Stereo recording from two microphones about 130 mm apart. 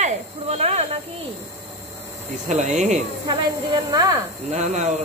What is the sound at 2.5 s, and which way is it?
Speech, 65° right (ahead or behind).